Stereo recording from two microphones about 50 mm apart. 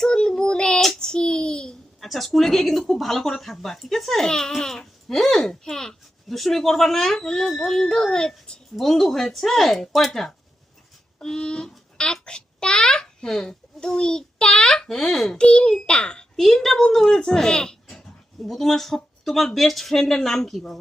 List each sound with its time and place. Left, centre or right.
0.0 s child singing: centre
2.0 s speech: centre
8.7 s speech: centre
10.1 s a child's voice: centre
15.3 s a child's voice: centre
16.4 s speech: centre
18.4 s speech: centre